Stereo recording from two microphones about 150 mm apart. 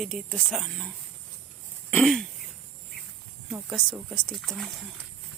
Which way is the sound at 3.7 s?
30° right (ahead or behind).